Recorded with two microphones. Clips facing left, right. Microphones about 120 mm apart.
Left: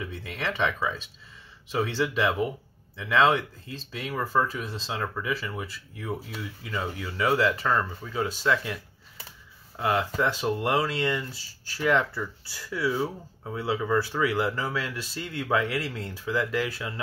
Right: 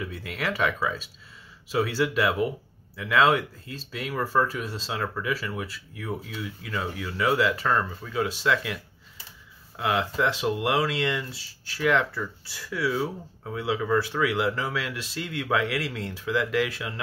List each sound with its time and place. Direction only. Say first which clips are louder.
0.0 s speech: right 1 dB; 5° right (ahead or behind)
9.8 s speech: even; centre (ahead or behind)